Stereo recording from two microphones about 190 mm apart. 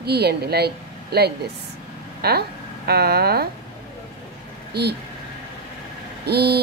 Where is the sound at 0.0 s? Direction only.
60° right (ahead or behind).